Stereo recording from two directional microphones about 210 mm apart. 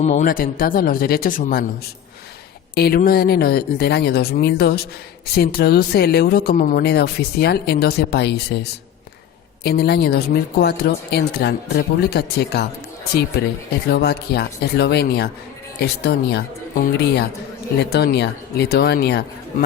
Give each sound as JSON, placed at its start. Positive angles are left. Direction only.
{"t": 0.0, "sound": "speech", "side_deg": 35}
{"t": 2.7, "sound": "speech", "side_deg": 50}
{"t": 9.6, "sound": "speech", "side_deg": 50}
{"t": 13.9, "sound": "speech", "side_deg": 50}